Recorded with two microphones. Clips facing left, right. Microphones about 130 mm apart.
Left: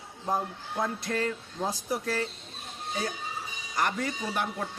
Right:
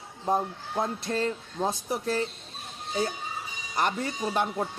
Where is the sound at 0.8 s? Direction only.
25° right (ahead or behind).